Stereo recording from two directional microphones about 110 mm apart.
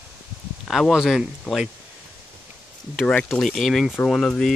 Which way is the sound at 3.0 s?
5° left (ahead or behind).